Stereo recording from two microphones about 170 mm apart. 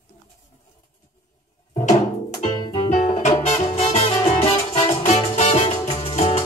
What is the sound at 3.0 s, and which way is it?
Music, 45° left (ahead or behind).